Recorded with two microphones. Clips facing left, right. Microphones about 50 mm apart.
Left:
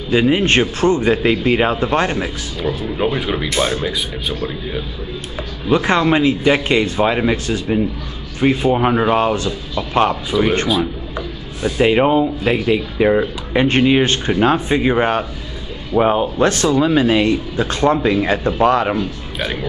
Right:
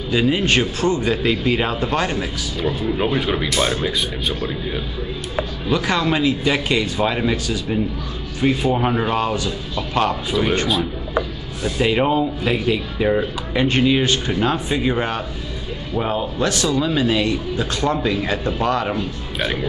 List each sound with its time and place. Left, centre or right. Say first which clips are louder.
0.1 s speech: left 4 dB; left
3.0 s speech: left 3 dB; centre
5.7 s speech: left 6 dB; left
7.4 s speech: left 4 dB; left
10.3 s speech: left 5 dB; centre
11.6 s speech: left 4 dB; left
13.7 s speech: left 3 dB; left